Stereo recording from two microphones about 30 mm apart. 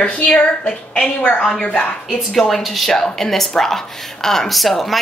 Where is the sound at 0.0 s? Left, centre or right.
Left.